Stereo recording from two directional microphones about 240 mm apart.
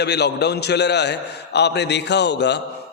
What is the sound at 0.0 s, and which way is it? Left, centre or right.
A man's voice, left.